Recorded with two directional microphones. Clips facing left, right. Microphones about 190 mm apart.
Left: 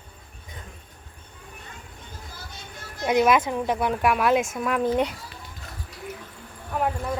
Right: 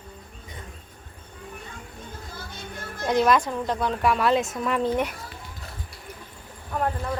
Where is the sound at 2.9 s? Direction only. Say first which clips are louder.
Left 1 dB; 15° left (ahead or behind).